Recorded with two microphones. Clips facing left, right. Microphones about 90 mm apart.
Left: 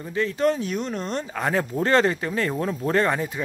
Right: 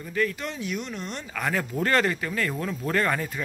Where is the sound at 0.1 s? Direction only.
25° left (ahead or behind).